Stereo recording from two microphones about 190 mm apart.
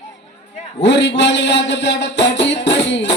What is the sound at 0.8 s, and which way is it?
A man's voice, 65° left (ahead or behind).